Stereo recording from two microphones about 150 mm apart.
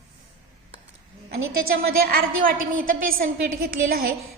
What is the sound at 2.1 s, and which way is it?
A woman's voice, 75° right (ahead or behind).